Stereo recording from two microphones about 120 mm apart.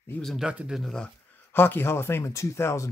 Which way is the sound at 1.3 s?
15° left (ahead or behind).